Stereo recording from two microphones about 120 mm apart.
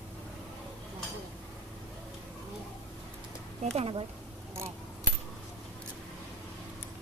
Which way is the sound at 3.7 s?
55° right (ahead or behind).